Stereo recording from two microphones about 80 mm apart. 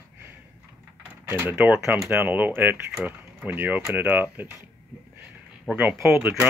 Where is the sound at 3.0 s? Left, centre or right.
Centre.